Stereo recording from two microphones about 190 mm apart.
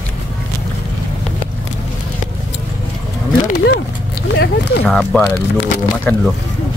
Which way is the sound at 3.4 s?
55° left (ahead or behind).